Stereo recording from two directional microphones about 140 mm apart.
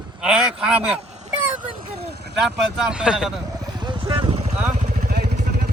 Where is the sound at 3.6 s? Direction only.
30° right (ahead or behind).